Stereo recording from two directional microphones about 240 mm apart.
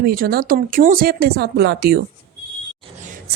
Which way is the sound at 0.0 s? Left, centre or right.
Right.